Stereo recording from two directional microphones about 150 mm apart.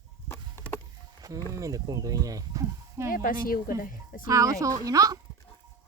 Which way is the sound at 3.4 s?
70° left (ahead or behind).